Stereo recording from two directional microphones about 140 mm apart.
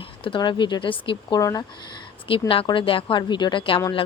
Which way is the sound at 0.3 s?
35° left (ahead or behind).